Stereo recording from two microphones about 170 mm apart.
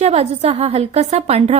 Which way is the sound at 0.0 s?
40° right (ahead or behind).